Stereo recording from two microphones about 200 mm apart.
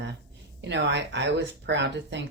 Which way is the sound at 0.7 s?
60° right (ahead or behind).